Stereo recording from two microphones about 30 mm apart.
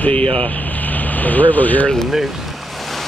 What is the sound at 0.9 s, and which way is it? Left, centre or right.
Speech, left.